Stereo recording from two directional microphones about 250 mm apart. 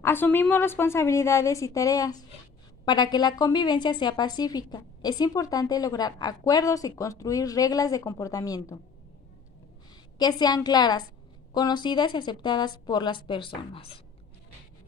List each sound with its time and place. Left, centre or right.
0.0 s a woman's voice: centre
10.1 s a woman's voice: centre